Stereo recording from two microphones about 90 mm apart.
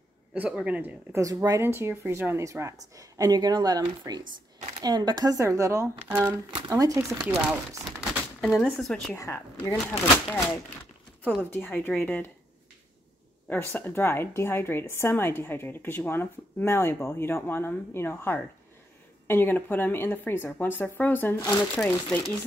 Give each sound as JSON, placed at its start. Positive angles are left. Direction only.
{"t": 0.3, "sound": "a man's voice", "side_deg": -10}
{"t": 1.1, "sound": "speech", "side_deg": -40}
{"t": 1.6, "sound": "speech", "side_deg": -30}
{"t": 6.0, "sound": "speech", "side_deg": -25}
{"t": 6.7, "sound": "speech", "side_deg": -35}
{"t": 7.2, "sound": "a man's voice", "side_deg": -15}
{"t": 8.4, "sound": "speech", "side_deg": 0}
{"t": 9.1, "sound": "a woman's voice", "side_deg": 30}
{"t": 11.5, "sound": "a woman's voice", "side_deg": 20}
{"t": 13.5, "sound": "a woman's voice", "side_deg": 20}